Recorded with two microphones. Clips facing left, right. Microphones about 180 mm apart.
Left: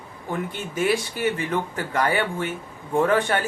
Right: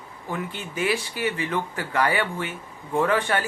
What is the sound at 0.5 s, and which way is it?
Speech, 50° left (ahead or behind).